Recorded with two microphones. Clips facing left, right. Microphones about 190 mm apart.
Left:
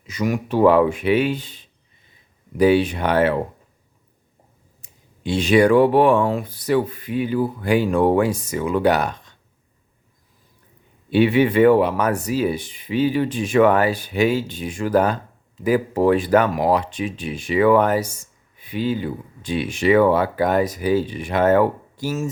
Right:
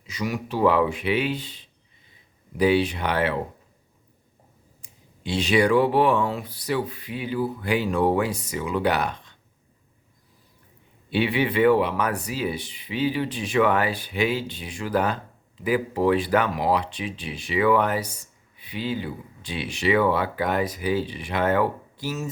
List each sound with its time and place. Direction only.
0.1 s speech: 50° left (ahead or behind)
4.8 s speech: 50° left (ahead or behind)
11.1 s speech: 45° left (ahead or behind)